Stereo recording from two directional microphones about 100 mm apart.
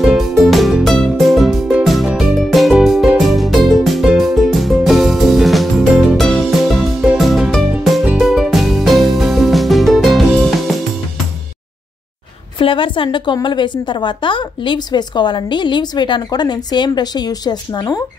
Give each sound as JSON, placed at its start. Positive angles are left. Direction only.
{"t": 0.0, "sound": "music", "side_deg": -5}
{"t": 12.5, "sound": "a woman's voice", "side_deg": 60}